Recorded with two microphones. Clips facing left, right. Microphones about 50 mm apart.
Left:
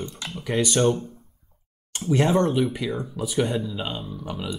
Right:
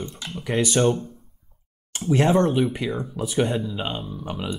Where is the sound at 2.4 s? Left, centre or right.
Centre.